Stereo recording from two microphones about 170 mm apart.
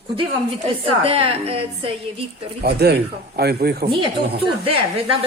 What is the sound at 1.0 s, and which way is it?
Speech, 35° right (ahead or behind).